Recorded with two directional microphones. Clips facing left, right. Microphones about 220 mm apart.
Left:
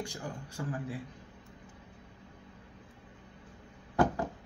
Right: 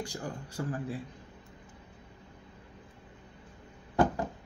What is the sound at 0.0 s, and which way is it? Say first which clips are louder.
Speech: right 2 dB; 35° right (ahead or behind).